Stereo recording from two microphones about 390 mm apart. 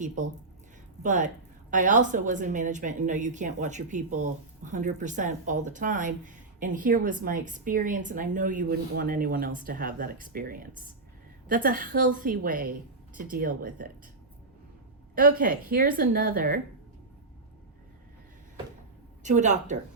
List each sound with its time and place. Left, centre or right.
1.0 s a woman's voice: centre
15.1 s a woman's voice: right
19.2 s speech: centre